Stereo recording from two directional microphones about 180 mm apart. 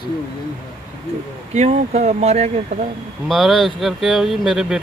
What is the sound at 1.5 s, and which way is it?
Speech, 40° right (ahead or behind).